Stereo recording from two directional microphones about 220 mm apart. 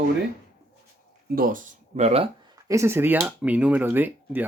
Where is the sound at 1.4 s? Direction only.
40° right (ahead or behind).